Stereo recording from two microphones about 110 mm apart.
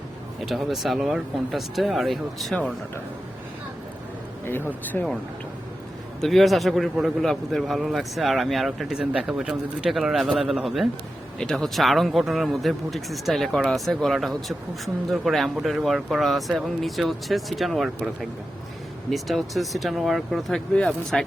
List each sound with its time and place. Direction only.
0.4 s a man's voice: centre (ahead or behind)
4.4 s speech: 20° left (ahead or behind)
6.1 s a man's voice: 5° left (ahead or behind)